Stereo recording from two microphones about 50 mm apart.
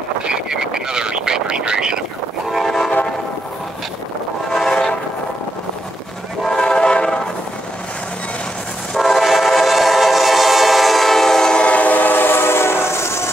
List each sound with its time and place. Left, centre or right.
0.3 s vehicle: centre
2.5 s train: centre
4.5 s train: centre
6.4 s train: centre
8.9 s train: centre
11.6 s train: left